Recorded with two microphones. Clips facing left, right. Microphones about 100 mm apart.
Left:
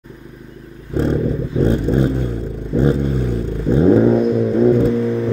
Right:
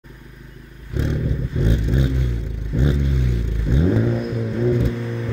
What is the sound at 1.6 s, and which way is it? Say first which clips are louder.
Vehicle: left 7 dB; 40° left (ahead or behind).